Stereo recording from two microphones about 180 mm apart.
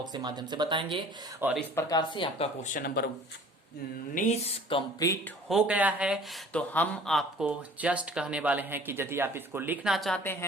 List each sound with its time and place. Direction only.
0.0 s speech: 25° right (ahead or behind)
1.4 s a man's voice: 5° right (ahead or behind)
1.7 s speech: 20° left (ahead or behind)
2.6 s speech: 45° left (ahead or behind)
4.1 s music: 40° left (ahead or behind)
4.9 s speech: 15° left (ahead or behind)
5.5 s speech: 5° right (ahead or behind)
6.5 s speech: 5° left (ahead or behind)